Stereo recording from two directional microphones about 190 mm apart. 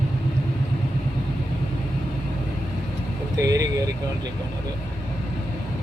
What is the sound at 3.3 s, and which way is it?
Vehicle, 20° right (ahead or behind).